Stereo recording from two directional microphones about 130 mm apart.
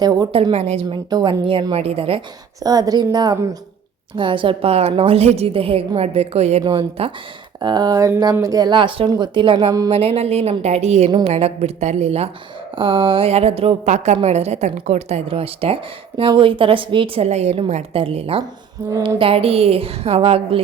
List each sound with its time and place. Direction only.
0.0 s a woman's voice: 30° right (ahead or behind)
0.5 s speech: 55° right (ahead or behind)
1.1 s speech: 40° right (ahead or behind)
2.6 s speech: 30° right (ahead or behind); by 6.6 s 55° right (ahead or behind)
6.6 s speech: 40° right (ahead or behind)
7.6 s speech: 35° right (ahead or behind)
9.9 s speech: 50° right (ahead or behind)
12.7 s speech: 40° right (ahead or behind)
13.8 s a woman's voice: 65° right (ahead or behind)
14.2 s speech: 55° right (ahead or behind)
17.2 s speech: 55° right (ahead or behind)